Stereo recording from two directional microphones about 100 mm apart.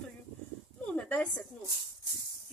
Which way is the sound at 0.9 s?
10° left (ahead or behind).